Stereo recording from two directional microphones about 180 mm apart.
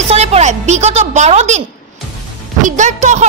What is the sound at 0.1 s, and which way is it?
A woman's voice, 35° right (ahead or behind).